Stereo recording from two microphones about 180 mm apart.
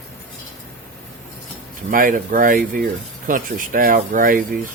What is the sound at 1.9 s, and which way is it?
Speech, 50° right (ahead or behind).